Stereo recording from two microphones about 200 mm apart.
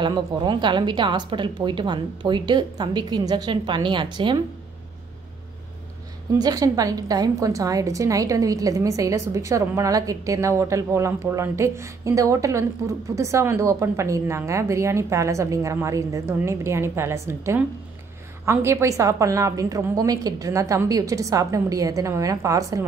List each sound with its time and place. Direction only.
0.0 s a woman's voice: 25° right (ahead or behind)
6.3 s a woman's voice: 20° right (ahead or behind)